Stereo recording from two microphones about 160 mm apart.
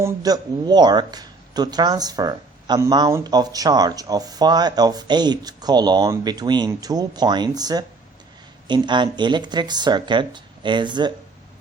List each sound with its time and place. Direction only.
0.0 s speech: 25° right (ahead or behind)